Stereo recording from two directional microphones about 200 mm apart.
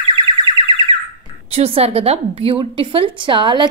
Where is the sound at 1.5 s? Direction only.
30° right (ahead or behind).